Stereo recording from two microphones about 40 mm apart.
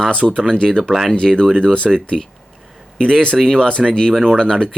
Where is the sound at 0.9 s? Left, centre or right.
Centre.